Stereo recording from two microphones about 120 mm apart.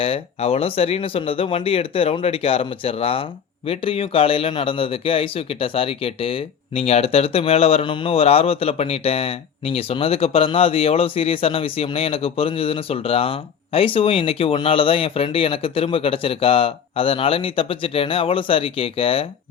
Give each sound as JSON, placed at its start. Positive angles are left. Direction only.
{"t": 0.0, "sound": "a man's voice", "side_deg": 55}